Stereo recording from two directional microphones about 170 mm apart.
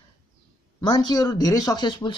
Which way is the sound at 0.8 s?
20° left (ahead or behind).